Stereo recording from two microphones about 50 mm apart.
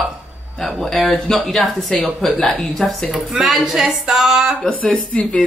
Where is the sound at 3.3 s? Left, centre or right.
Centre.